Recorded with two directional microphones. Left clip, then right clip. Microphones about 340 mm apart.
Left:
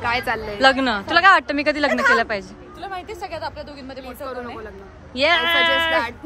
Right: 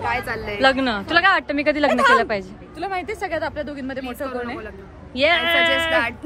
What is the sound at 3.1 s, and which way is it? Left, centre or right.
Speech, right.